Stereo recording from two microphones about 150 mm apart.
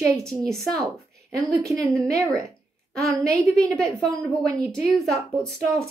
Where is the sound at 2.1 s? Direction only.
20° right (ahead or behind).